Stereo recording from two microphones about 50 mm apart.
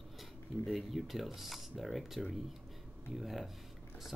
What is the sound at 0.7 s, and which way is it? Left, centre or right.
Speech, centre.